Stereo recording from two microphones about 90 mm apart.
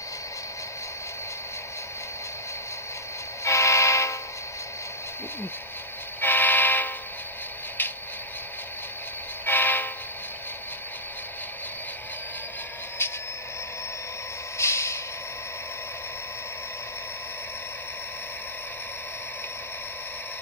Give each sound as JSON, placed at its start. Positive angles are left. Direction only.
{"t": 3.4, "sound": "vehicle", "side_deg": 35}
{"t": 6.2, "sound": "vehicle", "side_deg": 20}
{"t": 9.5, "sound": "train", "side_deg": 20}
{"t": 13.0, "sound": "a sound", "side_deg": 25}
{"t": 14.6, "sound": "vehicle", "side_deg": 30}